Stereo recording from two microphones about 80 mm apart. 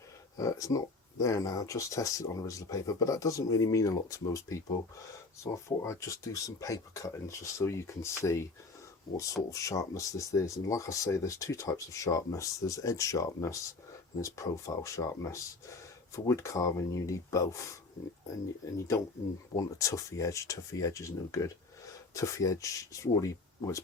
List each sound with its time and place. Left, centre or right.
0.3 s speech: left